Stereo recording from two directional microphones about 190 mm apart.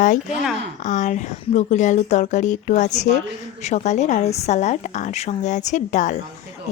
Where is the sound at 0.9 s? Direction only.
40° left (ahead or behind).